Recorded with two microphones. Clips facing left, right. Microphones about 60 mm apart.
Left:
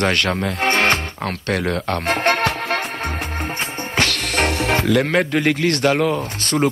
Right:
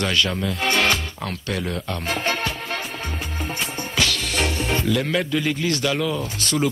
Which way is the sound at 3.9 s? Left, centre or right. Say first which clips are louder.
Left 4 dB; left.